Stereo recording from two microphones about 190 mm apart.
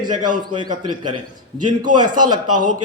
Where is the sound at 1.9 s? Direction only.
25° right (ahead or behind).